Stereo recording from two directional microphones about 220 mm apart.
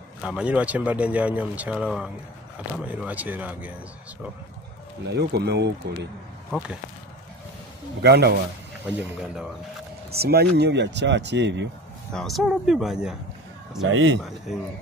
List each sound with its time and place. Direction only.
0.2 s speech: 5° right (ahead or behind)
5.1 s speech: 50° right (ahead or behind)
8.0 s speech: 45° right (ahead or behind)
8.8 s speech: 5° right (ahead or behind)
10.1 s speech: 45° right (ahead or behind)
12.1 s speech: centre (ahead or behind)
13.8 s speech: 60° right (ahead or behind)